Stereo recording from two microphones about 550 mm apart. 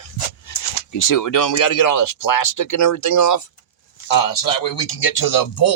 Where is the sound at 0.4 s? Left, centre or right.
Left.